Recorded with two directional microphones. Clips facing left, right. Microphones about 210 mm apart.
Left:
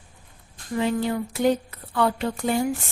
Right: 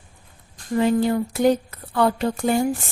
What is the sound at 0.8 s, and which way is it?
Speech, 40° right (ahead or behind).